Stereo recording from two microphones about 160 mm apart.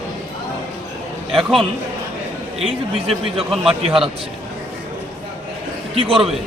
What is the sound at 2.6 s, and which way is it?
Speech, 35° right (ahead or behind).